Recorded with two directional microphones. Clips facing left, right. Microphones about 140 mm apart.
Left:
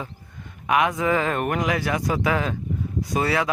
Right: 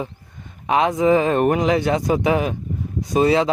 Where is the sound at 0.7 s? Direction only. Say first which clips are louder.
Right 5 dB; 25° right (ahead or behind).